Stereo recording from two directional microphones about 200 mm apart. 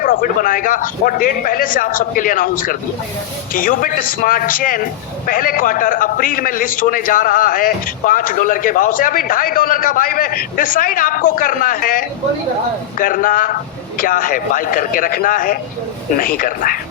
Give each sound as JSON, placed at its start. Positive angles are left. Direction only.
{"t": 0.0, "sound": "speech", "side_deg": 45}